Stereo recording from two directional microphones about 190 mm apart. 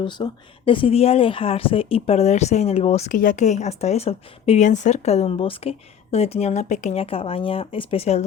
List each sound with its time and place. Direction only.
0.0 s a woman's voice: 25° left (ahead or behind)